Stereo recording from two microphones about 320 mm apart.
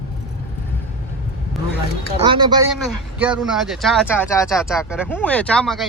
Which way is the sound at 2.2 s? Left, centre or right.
Centre.